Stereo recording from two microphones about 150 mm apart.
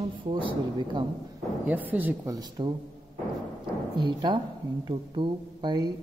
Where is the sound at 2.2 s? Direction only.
25° right (ahead or behind).